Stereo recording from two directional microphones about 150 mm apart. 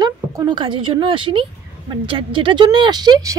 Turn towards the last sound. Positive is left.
turn(degrees=-25)  # may be behind; listen again after turning